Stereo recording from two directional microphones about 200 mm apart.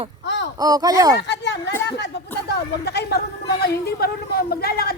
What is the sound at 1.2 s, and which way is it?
Speech, 60° left (ahead or behind).